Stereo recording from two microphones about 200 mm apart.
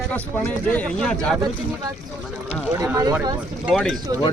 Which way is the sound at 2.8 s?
15° right (ahead or behind).